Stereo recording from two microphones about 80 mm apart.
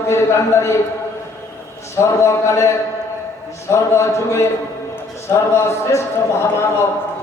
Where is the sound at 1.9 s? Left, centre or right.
Left.